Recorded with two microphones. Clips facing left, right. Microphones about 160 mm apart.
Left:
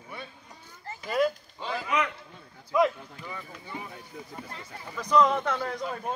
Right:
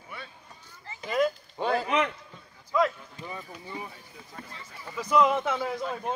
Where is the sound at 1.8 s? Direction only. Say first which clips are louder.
Left 1 dB; 30° right (ahead or behind).